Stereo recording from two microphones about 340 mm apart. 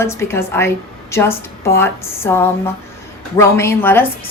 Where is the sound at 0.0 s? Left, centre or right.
Centre.